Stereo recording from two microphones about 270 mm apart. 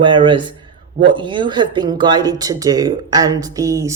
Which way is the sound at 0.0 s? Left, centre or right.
Centre.